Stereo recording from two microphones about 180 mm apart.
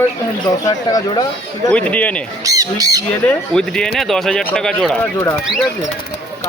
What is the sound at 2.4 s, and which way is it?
Speech, 20° right (ahead or behind).